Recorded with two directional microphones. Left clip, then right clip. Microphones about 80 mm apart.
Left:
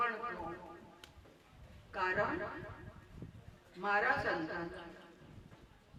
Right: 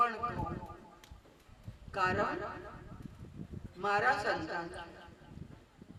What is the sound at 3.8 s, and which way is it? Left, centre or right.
A man's voice, right.